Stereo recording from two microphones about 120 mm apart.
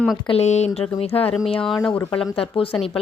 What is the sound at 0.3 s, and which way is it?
Speech, 65° left (ahead or behind).